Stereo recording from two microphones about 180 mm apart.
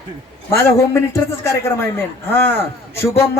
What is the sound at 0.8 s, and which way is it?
Speech, 15° left (ahead or behind).